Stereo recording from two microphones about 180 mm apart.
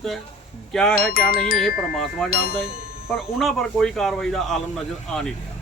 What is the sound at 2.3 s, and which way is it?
Speech, 55° left (ahead or behind).